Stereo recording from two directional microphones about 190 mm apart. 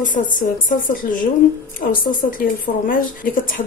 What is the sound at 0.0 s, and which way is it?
A woman's voice, 45° left (ahead or behind).